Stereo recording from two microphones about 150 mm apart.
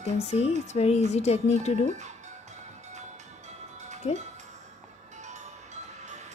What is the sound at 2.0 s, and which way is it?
Music, 50° right (ahead or behind).